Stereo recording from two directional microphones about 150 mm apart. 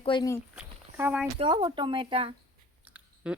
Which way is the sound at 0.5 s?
10° right (ahead or behind).